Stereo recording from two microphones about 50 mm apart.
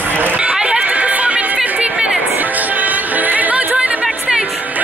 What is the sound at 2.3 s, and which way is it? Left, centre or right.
Music, right.